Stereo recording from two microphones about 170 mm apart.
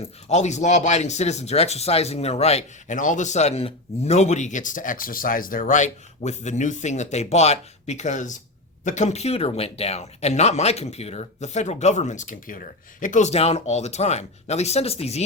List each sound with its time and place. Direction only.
0.0 s speech: 40° left (ahead or behind)